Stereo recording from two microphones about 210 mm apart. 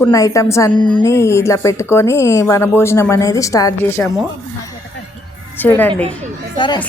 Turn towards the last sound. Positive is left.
turn(degrees=20)  # may be behind; listen again after turning